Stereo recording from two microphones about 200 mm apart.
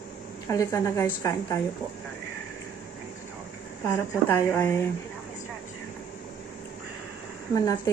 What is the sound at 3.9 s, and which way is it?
Speech, 10° left (ahead or behind).